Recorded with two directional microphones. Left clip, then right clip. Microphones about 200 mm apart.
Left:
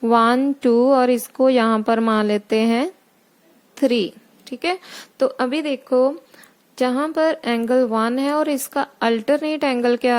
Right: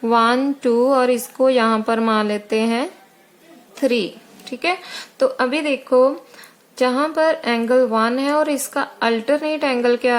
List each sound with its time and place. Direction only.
0.0 s speech: 45° left (ahead or behind)